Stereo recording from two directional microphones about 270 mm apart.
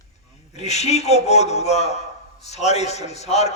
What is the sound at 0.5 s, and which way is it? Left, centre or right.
A man's voice, left.